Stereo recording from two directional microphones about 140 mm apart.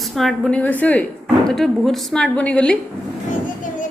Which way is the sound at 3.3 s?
70° left (ahead or behind).